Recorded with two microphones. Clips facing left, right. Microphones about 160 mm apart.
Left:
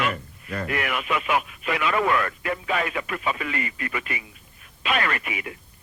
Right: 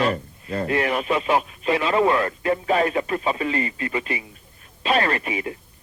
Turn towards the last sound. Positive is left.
turn(degrees=-30)  # may be behind; listen again after turning